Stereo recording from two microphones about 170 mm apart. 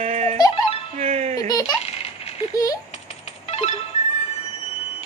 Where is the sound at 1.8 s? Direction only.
35° left (ahead or behind).